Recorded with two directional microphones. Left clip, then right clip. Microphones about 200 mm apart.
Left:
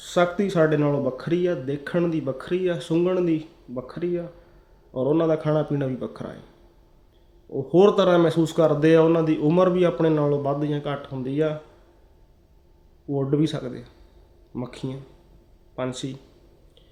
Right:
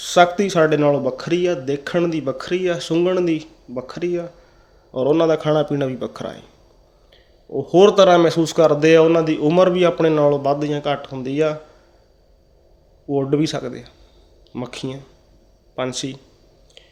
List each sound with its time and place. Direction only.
0.0 s speech: 10° left (ahead or behind)
7.5 s speech: 15° left (ahead or behind)
13.1 s speech: 15° left (ahead or behind)